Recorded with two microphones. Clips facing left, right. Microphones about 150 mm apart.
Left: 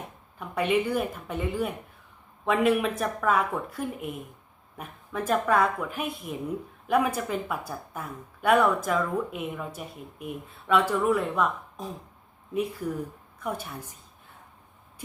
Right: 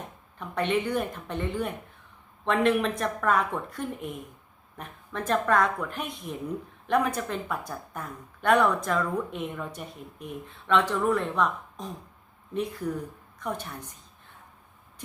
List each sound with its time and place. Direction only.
0.3 s a woman's voice: 5° left (ahead or behind)
13.4 s speech: 5° left (ahead or behind)